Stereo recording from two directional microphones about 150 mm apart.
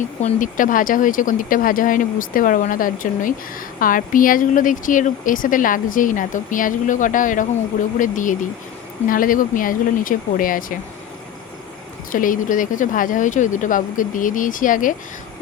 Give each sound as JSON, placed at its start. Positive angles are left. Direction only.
{"t": 0.0, "sound": "speech", "side_deg": 50}
{"t": 12.1, "sound": "speech", "side_deg": 65}